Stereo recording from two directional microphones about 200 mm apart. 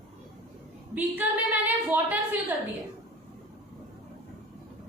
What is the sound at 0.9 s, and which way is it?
A woman's voice, 10° right (ahead or behind).